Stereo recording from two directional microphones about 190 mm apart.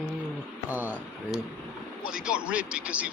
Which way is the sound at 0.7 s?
10° right (ahead or behind).